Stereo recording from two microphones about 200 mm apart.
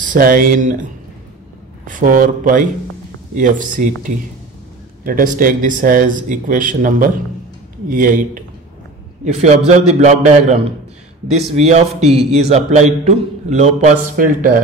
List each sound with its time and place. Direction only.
0.0 s a man's voice: 45° right (ahead or behind)
1.9 s a man's voice: 40° right (ahead or behind)
5.0 s a man's voice: 45° right (ahead or behind)